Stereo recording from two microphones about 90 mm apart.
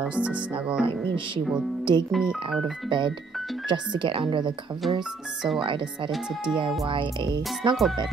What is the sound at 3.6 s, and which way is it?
Speech, 60° right (ahead or behind).